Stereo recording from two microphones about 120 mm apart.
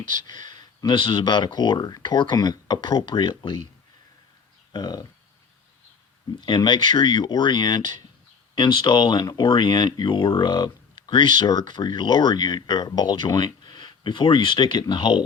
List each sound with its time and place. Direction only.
0.1 s speech: 40° left (ahead or behind)
4.7 s speech: 35° left (ahead or behind)
6.4 s speech: 40° left (ahead or behind)
11.0 s a sound: 40° left (ahead or behind)
11.3 s speech: 40° left (ahead or behind)